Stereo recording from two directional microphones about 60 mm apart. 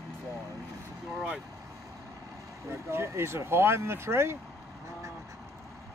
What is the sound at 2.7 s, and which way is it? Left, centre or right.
Speech, right.